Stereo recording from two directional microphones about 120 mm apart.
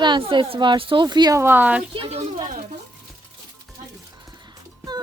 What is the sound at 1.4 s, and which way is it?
Speech, 15° right (ahead or behind).